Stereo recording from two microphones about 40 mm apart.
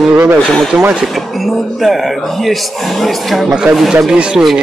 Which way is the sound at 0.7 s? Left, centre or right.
Right.